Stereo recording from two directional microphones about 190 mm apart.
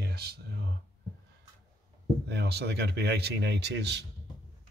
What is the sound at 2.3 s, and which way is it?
Speech, 60° right (ahead or behind).